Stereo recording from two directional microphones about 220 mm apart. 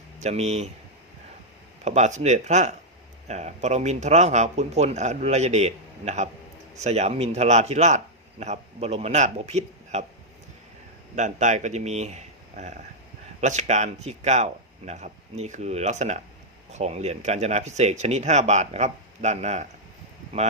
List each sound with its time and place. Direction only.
0.2 s speech: 30° right (ahead or behind)
1.8 s a man's voice: 30° right (ahead or behind)
11.1 s speech: 35° right (ahead or behind)